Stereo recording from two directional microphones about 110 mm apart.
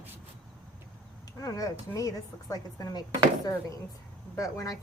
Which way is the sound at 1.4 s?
35° left (ahead or behind).